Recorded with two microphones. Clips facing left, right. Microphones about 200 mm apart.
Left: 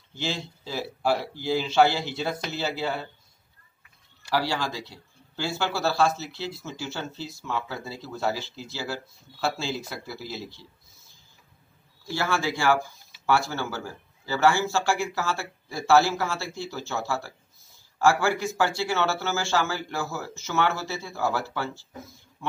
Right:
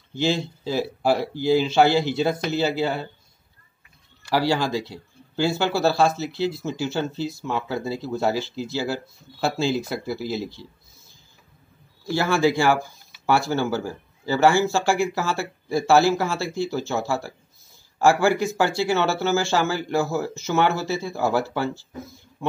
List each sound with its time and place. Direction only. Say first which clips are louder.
0.2 s speech: right 9 dB; 15° right (ahead or behind)
4.3 s speech: right 6 dB; 15° right (ahead or behind)
12.1 s speech: right 7 dB; 15° right (ahead or behind)